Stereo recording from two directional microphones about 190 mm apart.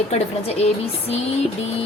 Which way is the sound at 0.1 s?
35° left (ahead or behind).